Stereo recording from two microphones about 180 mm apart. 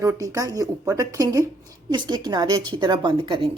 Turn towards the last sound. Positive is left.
turn(degrees=-30)  # may be behind; listen again after turning